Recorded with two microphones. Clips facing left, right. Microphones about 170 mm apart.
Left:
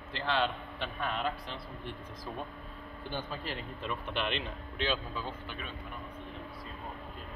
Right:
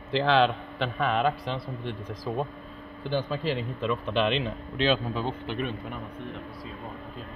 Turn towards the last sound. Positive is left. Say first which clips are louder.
# right 11 dB
turn(degrees=-70)  # may be behind; listen again after turning